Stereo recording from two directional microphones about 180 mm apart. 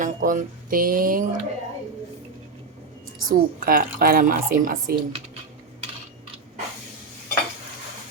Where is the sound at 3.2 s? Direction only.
55° right (ahead or behind).